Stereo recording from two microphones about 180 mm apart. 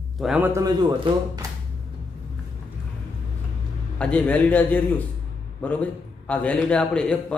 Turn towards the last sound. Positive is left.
turn(degrees=5)  # may be behind; listen again after turning